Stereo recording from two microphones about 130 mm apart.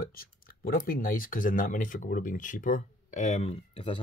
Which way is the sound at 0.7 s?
90° left.